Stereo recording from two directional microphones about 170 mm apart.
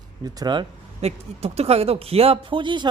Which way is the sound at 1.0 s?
35° right (ahead or behind).